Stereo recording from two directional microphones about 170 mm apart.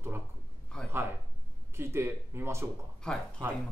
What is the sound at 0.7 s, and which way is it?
Speech, 5° left (ahead or behind).